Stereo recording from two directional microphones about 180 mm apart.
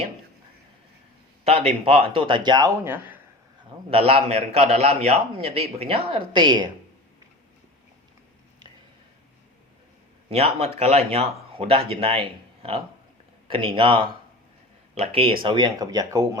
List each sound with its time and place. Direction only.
1.5 s a man's voice: 35° right (ahead or behind); by 3.2 s 10° right (ahead or behind)
3.8 s a man's voice: 30° right (ahead or behind)
10.2 s a man's voice: 35° right (ahead or behind)